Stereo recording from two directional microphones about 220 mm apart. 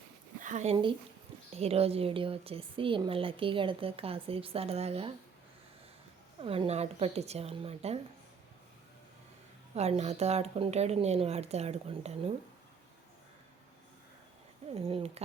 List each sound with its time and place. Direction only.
0.3 s a woman's voice: 35° right (ahead or behind)
6.4 s a woman's voice: 25° right (ahead or behind)
9.7 s a woman's voice: 30° right (ahead or behind)
14.8 s a woman's voice: 25° right (ahead or behind)